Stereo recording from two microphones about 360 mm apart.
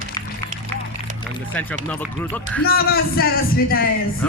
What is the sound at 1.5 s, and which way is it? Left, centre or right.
Speech, centre.